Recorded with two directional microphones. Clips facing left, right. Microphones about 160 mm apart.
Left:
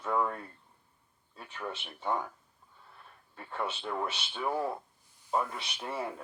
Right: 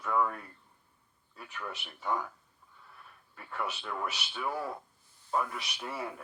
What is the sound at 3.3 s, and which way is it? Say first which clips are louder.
Speech: left 1 dB; 25° left (ahead or behind).